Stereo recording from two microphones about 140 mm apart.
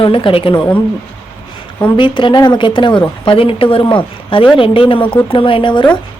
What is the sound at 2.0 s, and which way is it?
Speech, 35° left (ahead or behind).